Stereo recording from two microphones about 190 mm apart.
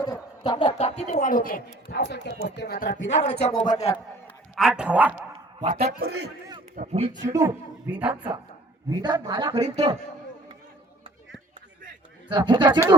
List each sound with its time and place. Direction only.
0.0 s speech: 20° left (ahead or behind); by 2.3 s 60° left (ahead or behind)
2.6 s speech: 50° left (ahead or behind)
3.2 s speech: 35° left (ahead or behind)
4.5 s a man's voice: centre (ahead or behind)
5.6 s a man's voice: 50° right (ahead or behind)
6.7 s a man's voice: 35° right (ahead or behind)
7.3 s a woman's voice: 10° right (ahead or behind)
8.9 s a man's voice: 20° right (ahead or behind)
12.3 s a man's voice: 25° right (ahead or behind)